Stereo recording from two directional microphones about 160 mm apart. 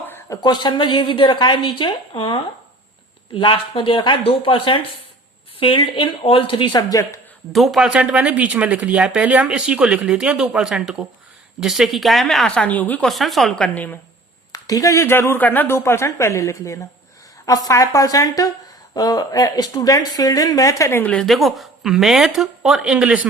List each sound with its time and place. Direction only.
0.1 s speech: 25° left (ahead or behind)
7.5 s speech: centre (ahead or behind)
14.5 s a woman's voice: 20° left (ahead or behind); by 23.3 s 5° right (ahead or behind)